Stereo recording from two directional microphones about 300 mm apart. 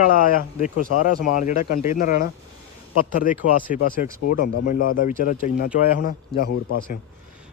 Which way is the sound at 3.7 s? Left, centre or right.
Left.